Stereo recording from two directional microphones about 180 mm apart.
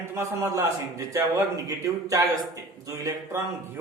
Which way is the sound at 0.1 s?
15° right (ahead or behind).